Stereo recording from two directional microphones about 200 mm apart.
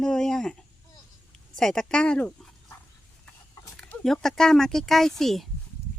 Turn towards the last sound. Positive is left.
turn(degrees=0)  # may be behind; listen again after turning